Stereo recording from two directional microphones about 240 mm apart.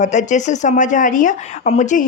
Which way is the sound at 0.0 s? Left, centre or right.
Left.